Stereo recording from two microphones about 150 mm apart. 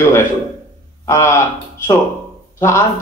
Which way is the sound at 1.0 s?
20° left (ahead or behind).